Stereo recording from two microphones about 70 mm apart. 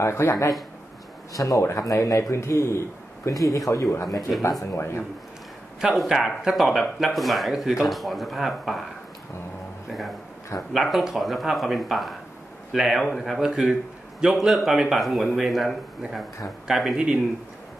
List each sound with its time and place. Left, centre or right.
0.0 s speech: left
1.6 s speech: left
5.8 s a man's voice: centre
9.8 s a man's voice: centre
13.4 s a man's voice: centre